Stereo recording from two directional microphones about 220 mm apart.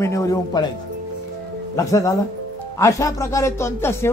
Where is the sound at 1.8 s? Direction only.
15° left (ahead or behind).